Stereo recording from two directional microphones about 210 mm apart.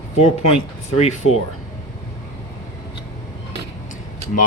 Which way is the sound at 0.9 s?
30° left (ahead or behind).